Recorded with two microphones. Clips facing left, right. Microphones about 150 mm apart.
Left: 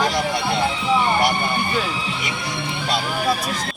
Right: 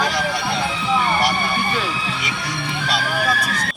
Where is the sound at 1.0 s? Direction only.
20° left (ahead or behind).